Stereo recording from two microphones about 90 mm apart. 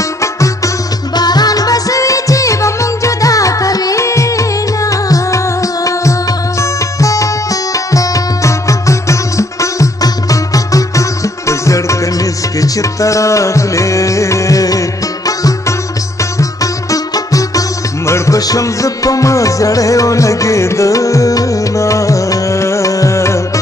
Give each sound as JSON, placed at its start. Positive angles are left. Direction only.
{"t": 1.1, "sound": "music", "side_deg": 50}
{"t": 16.9, "sound": "music", "side_deg": 40}